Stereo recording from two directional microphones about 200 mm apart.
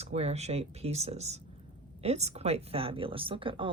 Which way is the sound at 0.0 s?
30° right (ahead or behind).